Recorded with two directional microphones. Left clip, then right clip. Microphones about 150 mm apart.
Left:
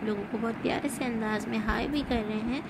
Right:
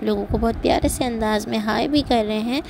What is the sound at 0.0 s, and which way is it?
A woman's voice, 50° right (ahead or behind).